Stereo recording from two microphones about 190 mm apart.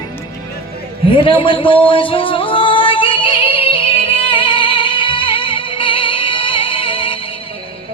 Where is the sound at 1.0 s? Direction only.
25° left (ahead or behind).